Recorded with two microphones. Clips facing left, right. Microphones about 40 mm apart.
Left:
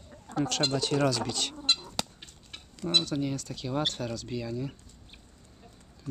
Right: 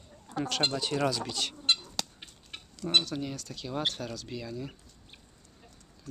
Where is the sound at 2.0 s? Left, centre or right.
Centre.